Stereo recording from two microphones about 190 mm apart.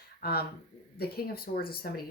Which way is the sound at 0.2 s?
55° left (ahead or behind).